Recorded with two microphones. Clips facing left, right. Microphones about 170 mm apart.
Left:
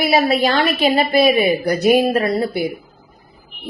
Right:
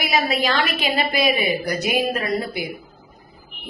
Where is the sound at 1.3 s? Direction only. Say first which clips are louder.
Left 6 dB; 45° left (ahead or behind).